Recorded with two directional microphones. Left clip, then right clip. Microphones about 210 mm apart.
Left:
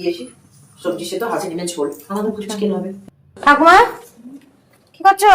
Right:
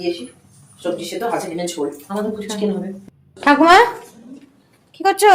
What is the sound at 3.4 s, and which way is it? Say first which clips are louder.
Speech: left 1 dB; 25° right (ahead or behind).